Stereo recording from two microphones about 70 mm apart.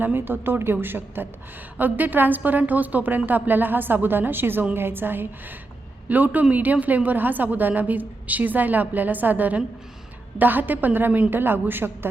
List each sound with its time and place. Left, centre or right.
0.0 s a woman's voice: right
11.8 s a woman's voice: centre